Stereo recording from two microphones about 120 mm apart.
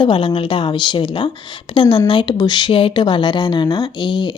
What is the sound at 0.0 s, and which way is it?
Speech, 45° left (ahead or behind).